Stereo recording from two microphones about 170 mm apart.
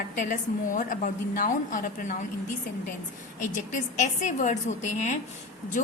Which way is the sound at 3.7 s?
45° left (ahead or behind).